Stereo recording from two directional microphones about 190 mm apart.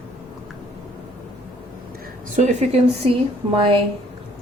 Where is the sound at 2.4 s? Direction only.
35° right (ahead or behind).